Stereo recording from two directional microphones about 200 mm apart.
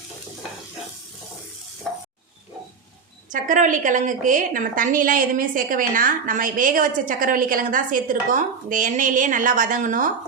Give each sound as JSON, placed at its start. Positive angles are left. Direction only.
{"t": 1.9, "sound": "stir", "side_deg": 0}
{"t": 3.3, "sound": "a woman's voice", "side_deg": -40}